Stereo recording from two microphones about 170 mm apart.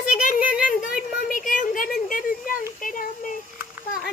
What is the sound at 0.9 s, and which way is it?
Speech, 55° left (ahead or behind).